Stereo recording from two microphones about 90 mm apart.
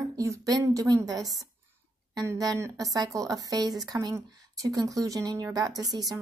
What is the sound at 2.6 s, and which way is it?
A woman's voice, 40° right (ahead or behind).